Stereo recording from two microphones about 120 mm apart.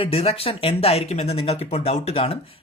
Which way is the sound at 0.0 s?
55° left (ahead or behind).